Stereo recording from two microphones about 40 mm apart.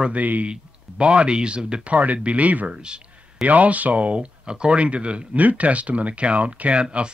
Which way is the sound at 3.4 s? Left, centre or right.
Right.